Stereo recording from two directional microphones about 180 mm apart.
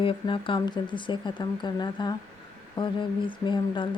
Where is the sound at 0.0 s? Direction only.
30° left (ahead or behind).